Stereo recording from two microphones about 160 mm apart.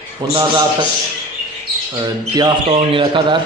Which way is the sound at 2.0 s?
25° right (ahead or behind).